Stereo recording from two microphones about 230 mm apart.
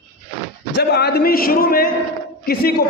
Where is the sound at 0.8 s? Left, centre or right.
Left.